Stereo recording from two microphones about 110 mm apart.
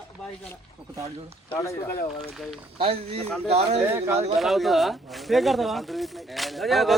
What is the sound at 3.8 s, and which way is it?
Speech, 25° right (ahead or behind).